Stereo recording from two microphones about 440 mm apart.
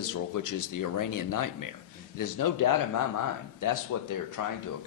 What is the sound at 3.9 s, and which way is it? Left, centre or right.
Speech, left.